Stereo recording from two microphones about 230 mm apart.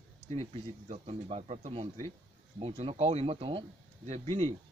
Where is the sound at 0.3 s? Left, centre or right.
Right.